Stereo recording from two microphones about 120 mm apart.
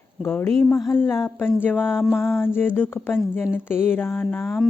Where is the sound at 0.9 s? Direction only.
20° left (ahead or behind).